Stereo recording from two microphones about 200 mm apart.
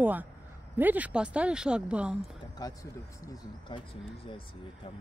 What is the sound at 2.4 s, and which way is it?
Speech, 20° left (ahead or behind).